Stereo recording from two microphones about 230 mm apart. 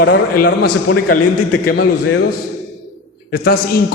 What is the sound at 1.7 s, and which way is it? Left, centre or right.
Speech, left.